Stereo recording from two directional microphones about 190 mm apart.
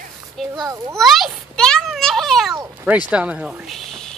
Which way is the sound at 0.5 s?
20° right (ahead or behind).